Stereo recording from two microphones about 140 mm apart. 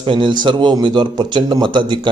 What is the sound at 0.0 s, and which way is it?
A man's voice, 35° right (ahead or behind).